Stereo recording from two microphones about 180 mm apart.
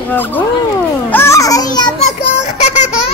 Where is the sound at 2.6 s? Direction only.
40° left (ahead or behind).